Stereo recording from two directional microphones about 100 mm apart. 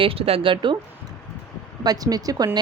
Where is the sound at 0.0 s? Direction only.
75° right (ahead or behind); by 0.8 s 55° right (ahead or behind).